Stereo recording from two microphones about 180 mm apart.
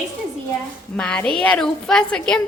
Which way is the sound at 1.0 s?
5° left (ahead or behind).